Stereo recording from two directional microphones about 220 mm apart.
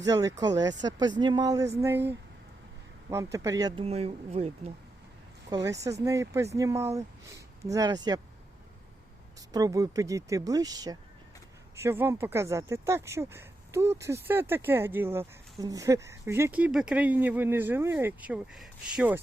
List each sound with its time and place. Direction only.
0.0 s speech: 15° right (ahead or behind)
3.3 s speech: 15° right (ahead or behind)
5.5 s speech: 15° right (ahead or behind)
9.5 s speech: 15° right (ahead or behind)